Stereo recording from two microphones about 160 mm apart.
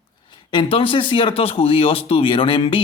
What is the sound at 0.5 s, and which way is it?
Speech, 35° left (ahead or behind).